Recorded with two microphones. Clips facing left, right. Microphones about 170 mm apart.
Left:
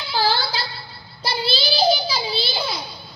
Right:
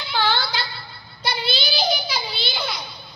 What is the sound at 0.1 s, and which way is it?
Child singing, 35° left (ahead or behind).